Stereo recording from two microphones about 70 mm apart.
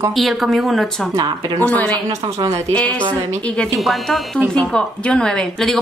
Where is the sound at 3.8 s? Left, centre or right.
Centre.